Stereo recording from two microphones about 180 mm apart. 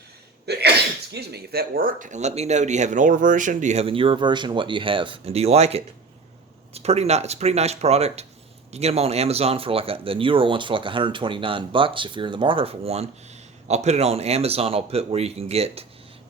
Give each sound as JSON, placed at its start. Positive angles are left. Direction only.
{"t": 0.5, "sound": "sneeze", "side_deg": -65}
{"t": 1.1, "sound": "speech", "side_deg": -60}